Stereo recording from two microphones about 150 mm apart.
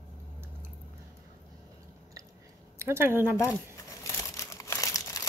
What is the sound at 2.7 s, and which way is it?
Speech, 15° right (ahead or behind).